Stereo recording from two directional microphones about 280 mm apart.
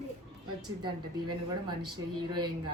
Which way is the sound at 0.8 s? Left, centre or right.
Centre.